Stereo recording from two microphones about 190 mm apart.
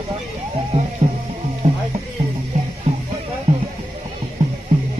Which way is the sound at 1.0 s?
30° right (ahead or behind).